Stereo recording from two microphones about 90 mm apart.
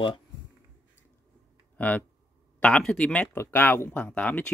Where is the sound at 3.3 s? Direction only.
25° left (ahead or behind).